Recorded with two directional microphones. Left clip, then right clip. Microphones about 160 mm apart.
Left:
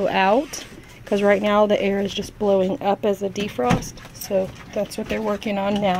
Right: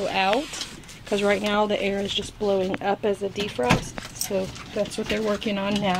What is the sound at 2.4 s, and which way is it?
Speech, 30° left (ahead or behind).